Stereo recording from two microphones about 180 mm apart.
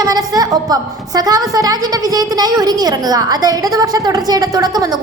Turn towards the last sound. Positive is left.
turn(degrees=-20)  # may be behind; listen again after turning